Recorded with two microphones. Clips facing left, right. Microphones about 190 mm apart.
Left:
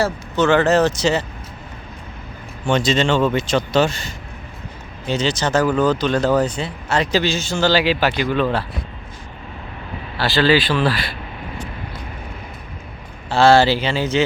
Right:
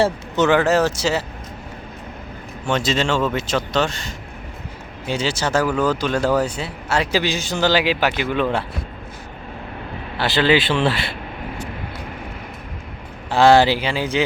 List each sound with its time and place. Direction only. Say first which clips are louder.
0.0 s speech: right 1 dB; 20° right (ahead or behind)
2.6 s a man's voice: left 3 dB; 5° right (ahead or behind)
5.0 s speech: left 2 dB; 10° right (ahead or behind)
10.2 s speech: left 1 dB; 20° right (ahead or behind)
13.3 s speech: even; 15° right (ahead or behind)